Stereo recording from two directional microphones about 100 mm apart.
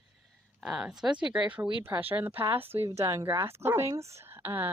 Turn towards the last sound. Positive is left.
turn(degrees=-20)  # may be behind; listen again after turning